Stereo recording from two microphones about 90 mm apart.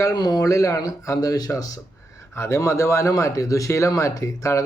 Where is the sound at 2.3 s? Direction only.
30° left (ahead or behind).